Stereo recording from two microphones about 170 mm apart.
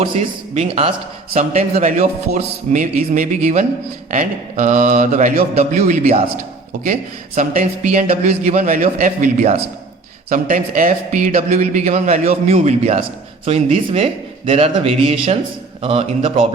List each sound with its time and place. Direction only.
0.0 s a man's voice: 35° right (ahead or behind)
7.3 s a man's voice: 50° right (ahead or behind)